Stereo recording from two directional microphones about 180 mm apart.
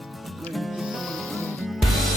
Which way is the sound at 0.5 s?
Centre (ahead or behind).